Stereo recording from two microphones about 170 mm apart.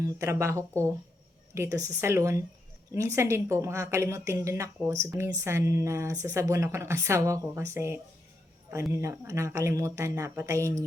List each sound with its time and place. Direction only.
0.0 s a woman's voice: 15° right (ahead or behind)